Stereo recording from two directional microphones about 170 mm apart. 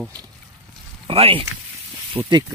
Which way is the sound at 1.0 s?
35° right (ahead or behind).